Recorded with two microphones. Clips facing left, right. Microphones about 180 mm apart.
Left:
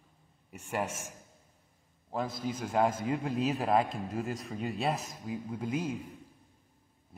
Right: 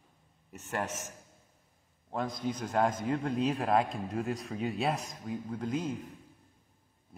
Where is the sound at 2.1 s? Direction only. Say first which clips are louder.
Even; 5° left (ahead or behind).